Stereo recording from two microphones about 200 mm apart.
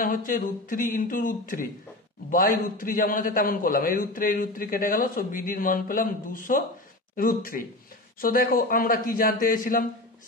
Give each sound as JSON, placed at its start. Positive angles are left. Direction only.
{"t": 0.0, "sound": "a man's voice", "side_deg": 45}